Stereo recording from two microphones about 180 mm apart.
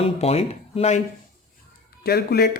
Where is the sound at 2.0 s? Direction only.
60° left (ahead or behind).